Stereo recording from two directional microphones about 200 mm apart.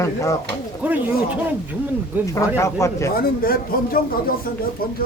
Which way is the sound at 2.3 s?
15° left (ahead or behind).